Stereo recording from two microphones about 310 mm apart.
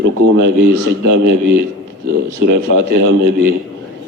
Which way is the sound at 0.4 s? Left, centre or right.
Right.